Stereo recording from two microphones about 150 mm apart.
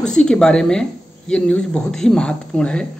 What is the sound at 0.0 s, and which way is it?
Speech, 5° left (ahead or behind).